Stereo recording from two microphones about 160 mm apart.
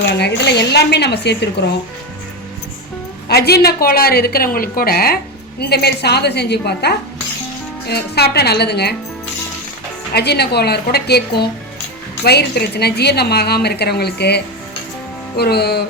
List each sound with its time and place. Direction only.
0.2 s a woman's voice: 90° left
3.2 s a woman's voice: 85° left
10.1 s a woman's voice: 90° left